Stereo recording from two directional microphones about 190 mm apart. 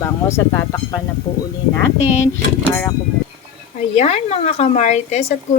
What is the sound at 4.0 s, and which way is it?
Speech, 35° left (ahead or behind).